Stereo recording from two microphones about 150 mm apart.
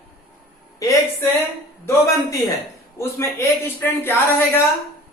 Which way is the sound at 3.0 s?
20° left (ahead or behind).